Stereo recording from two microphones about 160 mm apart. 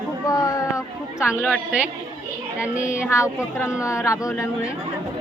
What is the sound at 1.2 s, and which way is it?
Speech, 5° right (ahead or behind).